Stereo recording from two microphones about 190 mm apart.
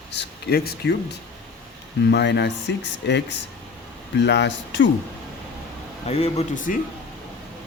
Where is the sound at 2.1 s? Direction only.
65° left (ahead or behind).